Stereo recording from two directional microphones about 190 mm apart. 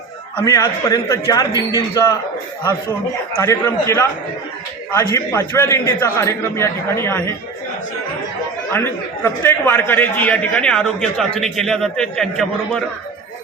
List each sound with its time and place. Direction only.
0.3 s a man's voice: 15° left (ahead or behind)
3.3 s a man's voice: 15° left (ahead or behind)
8.7 s a man's voice: 10° left (ahead or behind)